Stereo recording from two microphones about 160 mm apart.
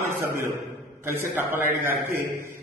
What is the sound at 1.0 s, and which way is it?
Speech, 15° right (ahead or behind).